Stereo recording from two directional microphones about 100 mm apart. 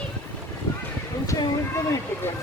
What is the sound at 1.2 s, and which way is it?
Speech, 35° left (ahead or behind).